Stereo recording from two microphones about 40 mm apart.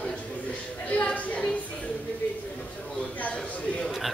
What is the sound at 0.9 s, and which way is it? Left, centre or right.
Music, left.